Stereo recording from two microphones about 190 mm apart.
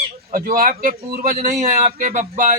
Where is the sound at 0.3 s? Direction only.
45° right (ahead or behind).